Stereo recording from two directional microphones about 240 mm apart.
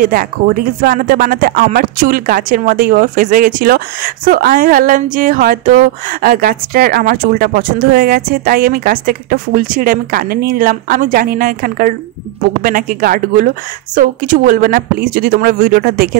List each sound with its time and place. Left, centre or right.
0.0 s speech: right